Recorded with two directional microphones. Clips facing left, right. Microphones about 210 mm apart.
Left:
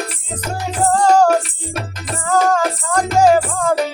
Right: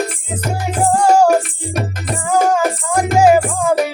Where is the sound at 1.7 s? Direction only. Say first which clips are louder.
Right 6 dB; 50° right (ahead or behind).